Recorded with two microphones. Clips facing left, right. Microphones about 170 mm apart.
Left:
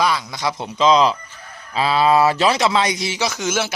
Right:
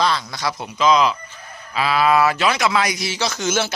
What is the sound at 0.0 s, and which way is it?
Speech, 10° left (ahead or behind).